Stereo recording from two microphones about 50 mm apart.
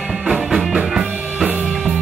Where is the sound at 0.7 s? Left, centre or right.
Centre.